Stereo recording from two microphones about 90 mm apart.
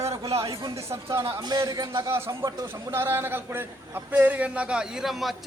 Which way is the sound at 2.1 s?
30° right (ahead or behind).